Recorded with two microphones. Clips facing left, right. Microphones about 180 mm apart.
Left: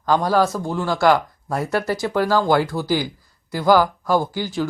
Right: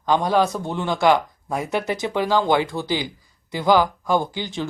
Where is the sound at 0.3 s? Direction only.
20° right (ahead or behind).